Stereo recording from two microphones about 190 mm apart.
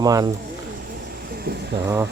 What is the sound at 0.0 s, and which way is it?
Speech, 20° right (ahead or behind).